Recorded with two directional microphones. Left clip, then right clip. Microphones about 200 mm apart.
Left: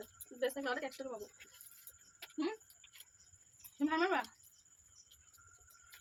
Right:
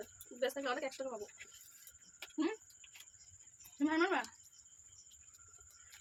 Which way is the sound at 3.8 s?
10° right (ahead or behind).